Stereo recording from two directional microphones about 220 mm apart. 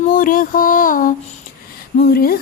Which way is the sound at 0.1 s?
40° left (ahead or behind).